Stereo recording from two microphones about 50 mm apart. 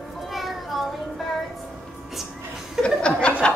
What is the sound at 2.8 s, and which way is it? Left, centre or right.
Chuckle, centre.